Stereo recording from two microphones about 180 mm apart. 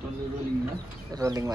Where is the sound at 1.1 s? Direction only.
20° right (ahead or behind).